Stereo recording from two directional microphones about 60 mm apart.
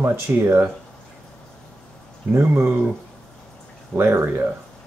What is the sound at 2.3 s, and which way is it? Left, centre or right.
Speech, right.